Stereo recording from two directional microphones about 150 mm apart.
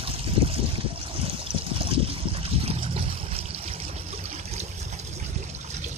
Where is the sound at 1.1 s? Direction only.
40° right (ahead or behind).